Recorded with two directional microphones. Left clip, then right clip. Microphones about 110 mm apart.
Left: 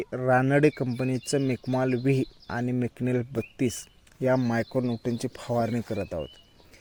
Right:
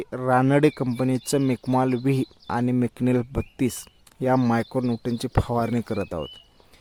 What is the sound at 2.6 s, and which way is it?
Speech, 45° right (ahead or behind).